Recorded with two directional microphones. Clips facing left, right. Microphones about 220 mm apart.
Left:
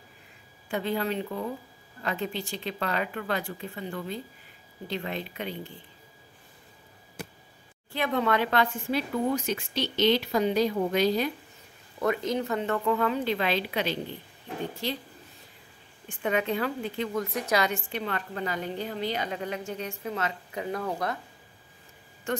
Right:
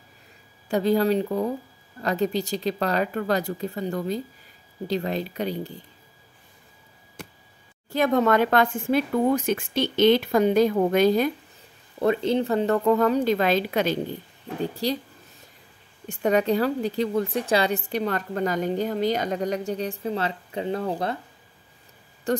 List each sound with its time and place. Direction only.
0.7 s a woman's voice: 40° right (ahead or behind)
7.9 s speech: 45° right (ahead or behind)
12.0 s a woman's voice: 30° right (ahead or behind)
16.1 s a woman's voice: 40° right (ahead or behind)
22.3 s a woman's voice: 35° right (ahead or behind)